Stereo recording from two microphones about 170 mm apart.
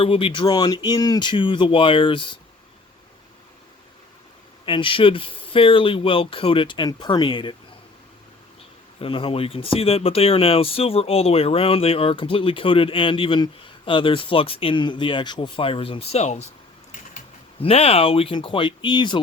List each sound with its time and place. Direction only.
0.0 s speech: 30° left (ahead or behind)
4.6 s speech: 30° left (ahead or behind)
9.0 s speech: 30° left (ahead or behind)
17.6 s speech: 35° left (ahead or behind)